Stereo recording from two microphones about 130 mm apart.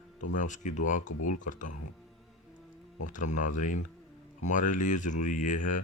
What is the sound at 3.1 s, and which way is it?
Speech, 80° left.